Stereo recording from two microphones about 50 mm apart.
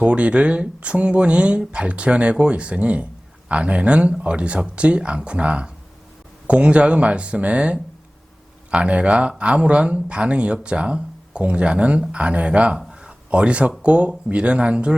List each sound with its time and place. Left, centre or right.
0.0 s speech: right